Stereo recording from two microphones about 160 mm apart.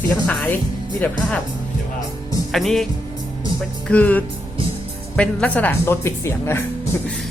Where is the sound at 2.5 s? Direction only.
Centre (ahead or behind).